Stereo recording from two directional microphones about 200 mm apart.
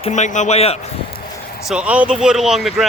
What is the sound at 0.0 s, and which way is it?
Speech, 35° left (ahead or behind).